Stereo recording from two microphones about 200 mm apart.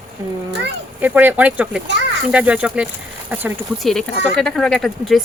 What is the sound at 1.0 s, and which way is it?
Speech, 10° right (ahead or behind).